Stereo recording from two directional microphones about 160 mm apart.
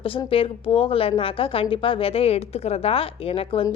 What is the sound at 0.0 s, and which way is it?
A woman's voice, 35° left (ahead or behind).